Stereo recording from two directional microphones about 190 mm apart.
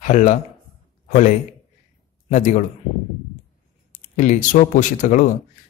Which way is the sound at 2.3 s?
40° left (ahead or behind).